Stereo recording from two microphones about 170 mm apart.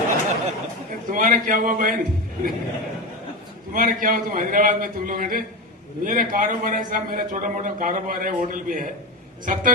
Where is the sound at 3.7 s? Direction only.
55° right (ahead or behind).